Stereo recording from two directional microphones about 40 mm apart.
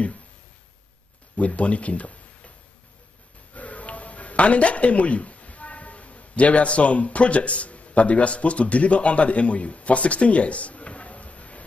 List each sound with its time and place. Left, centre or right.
1.3 s speech: left
3.5 s speech: left